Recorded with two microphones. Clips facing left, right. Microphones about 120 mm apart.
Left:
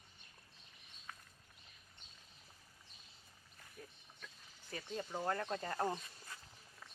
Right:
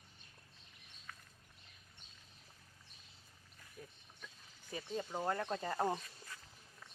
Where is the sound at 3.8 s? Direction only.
10° right (ahead or behind).